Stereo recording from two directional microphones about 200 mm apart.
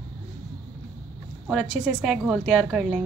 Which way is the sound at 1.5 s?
5° right (ahead or behind).